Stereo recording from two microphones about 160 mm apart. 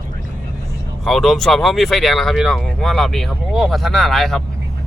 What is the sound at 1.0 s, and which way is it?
Speech, centre (ahead or behind).